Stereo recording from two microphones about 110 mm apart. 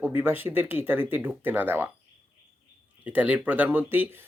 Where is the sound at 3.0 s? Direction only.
15° right (ahead or behind).